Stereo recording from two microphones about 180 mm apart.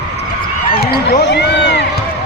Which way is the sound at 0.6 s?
55° left (ahead or behind).